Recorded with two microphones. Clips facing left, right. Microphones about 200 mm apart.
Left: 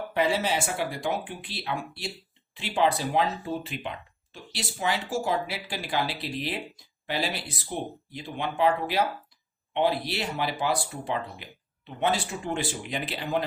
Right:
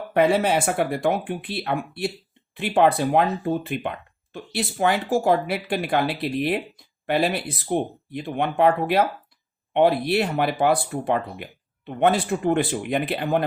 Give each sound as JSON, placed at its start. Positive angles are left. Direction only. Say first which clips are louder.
{"t": 0.1, "sound": "speech", "louder": "right 7 dB", "side_deg": -55}